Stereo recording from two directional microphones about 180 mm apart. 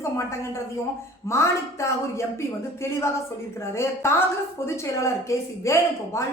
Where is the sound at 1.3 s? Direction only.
15° left (ahead or behind).